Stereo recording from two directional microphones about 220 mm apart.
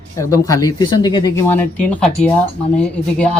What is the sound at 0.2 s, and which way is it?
Speech, 15° left (ahead or behind).